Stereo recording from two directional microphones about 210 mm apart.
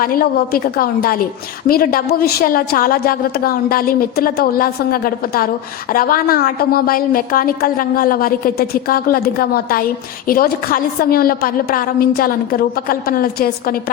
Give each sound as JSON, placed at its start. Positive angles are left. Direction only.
{"t": 0.0, "sound": "a woman's voice", "side_deg": 45}